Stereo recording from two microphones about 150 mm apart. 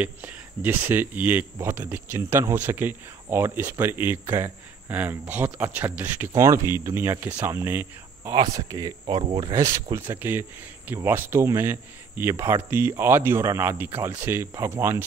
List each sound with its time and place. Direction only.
0.6 s speech: 15° right (ahead or behind)